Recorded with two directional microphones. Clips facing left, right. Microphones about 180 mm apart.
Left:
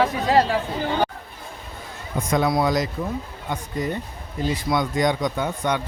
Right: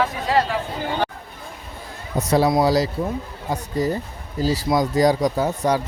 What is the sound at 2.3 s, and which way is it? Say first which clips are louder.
Speech: right 3 dB; 35° right (ahead or behind).